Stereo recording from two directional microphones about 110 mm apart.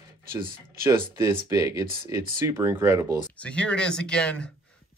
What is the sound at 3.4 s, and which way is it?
Speech, 10° left (ahead or behind).